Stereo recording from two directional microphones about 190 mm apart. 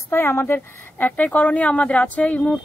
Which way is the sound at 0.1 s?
10° left (ahead or behind).